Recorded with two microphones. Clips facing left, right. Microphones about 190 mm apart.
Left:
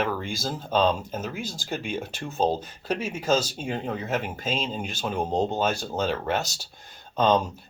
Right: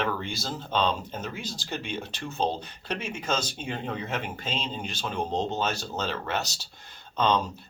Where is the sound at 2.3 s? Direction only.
45° left (ahead or behind).